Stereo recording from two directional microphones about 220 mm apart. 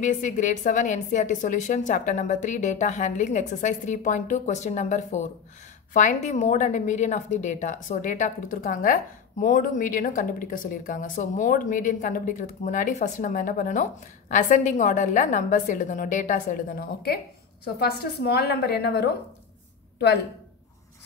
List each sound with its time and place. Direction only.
0.0 s a woman's voice: 35° left (ahead or behind)